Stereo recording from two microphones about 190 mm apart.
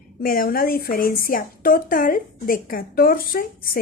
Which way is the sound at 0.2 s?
50° left (ahead or behind).